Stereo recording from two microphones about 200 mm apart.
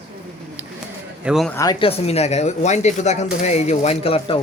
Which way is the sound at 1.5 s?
20° left (ahead or behind).